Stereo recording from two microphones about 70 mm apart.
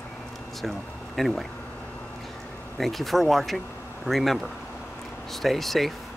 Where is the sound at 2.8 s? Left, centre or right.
Centre.